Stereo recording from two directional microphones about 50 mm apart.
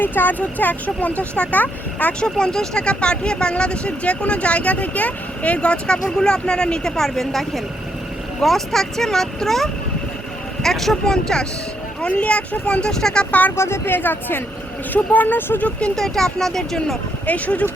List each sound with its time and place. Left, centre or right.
0.0 s speech: left
2.2 s speech: centre
12.0 s speech: left
12.9 s speech: centre
13.6 s speech: left
16.0 s speech: centre
17.2 s speech: left